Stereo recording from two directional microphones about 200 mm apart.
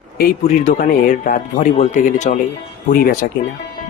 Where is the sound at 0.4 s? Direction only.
35° left (ahead or behind).